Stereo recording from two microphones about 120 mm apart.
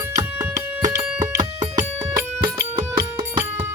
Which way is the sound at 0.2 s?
30° right (ahead or behind).